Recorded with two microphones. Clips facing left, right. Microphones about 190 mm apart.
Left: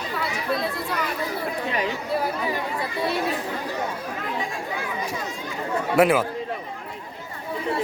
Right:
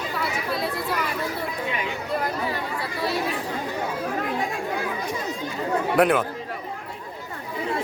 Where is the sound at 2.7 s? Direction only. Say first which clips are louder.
Left 1 dB; 25° left (ahead or behind).